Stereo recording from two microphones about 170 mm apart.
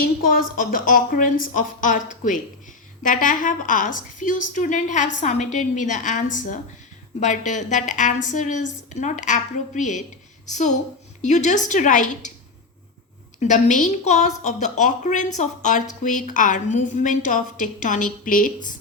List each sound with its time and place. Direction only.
0.3 s a woman's voice: 55° left (ahead or behind)
13.4 s a woman's voice: 45° left (ahead or behind)